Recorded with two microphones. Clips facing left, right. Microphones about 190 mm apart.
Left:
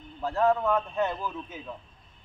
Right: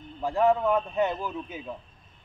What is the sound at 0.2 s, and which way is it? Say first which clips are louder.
A man's voice: right 2 dB; 15° right (ahead or behind).